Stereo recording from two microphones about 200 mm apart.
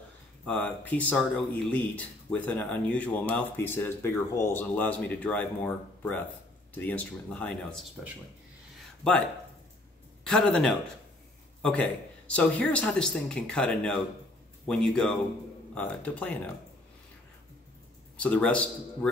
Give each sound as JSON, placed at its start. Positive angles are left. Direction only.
{"t": 0.5, "sound": "speech", "side_deg": 5}
{"t": 9.0, "sound": "speech", "side_deg": 5}
{"t": 10.2, "sound": "speech", "side_deg": 0}
{"t": 18.1, "sound": "speech", "side_deg": 5}